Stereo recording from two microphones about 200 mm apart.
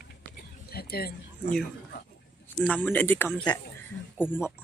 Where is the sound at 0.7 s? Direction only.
50° left (ahead or behind).